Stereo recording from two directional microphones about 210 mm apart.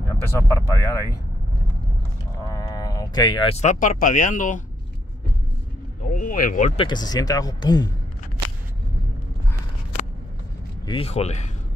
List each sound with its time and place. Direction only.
0.1 s speech: 15° left (ahead or behind)
2.4 s speech: 15° left (ahead or behind); by 4.6 s 35° left (ahead or behind)
6.1 s a sound: 40° left (ahead or behind)
6.8 s speech: 20° left (ahead or behind)
10.9 s speech: 30° left (ahead or behind)